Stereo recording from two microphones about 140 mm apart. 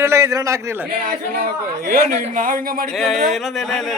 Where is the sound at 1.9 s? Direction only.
75° right (ahead or behind).